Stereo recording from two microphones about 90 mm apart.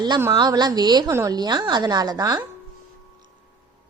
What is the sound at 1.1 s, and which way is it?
Speech, 35° right (ahead or behind).